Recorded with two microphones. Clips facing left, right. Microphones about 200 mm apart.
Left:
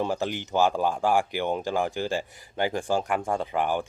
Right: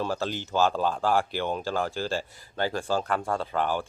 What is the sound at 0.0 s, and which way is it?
Speech, 15° left (ahead or behind).